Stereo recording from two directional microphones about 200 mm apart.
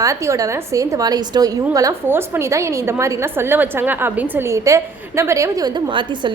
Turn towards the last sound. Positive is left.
turn(degrees=-25)  # may be behind; listen again after turning